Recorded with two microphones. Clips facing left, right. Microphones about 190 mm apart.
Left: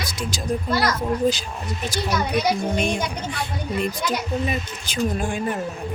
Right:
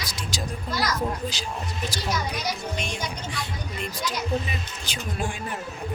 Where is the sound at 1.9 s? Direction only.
60° left (ahead or behind).